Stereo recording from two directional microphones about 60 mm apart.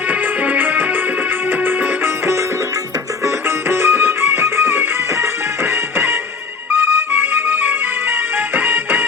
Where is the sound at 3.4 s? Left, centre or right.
Right.